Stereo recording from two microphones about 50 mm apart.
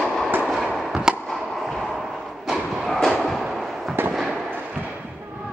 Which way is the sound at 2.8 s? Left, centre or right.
Centre.